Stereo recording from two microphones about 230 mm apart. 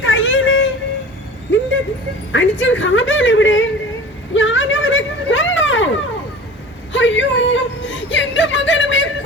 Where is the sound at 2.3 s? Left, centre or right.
Left.